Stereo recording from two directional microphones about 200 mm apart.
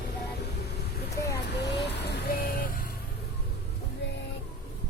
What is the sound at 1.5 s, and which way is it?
Vehicle, 55° left (ahead or behind).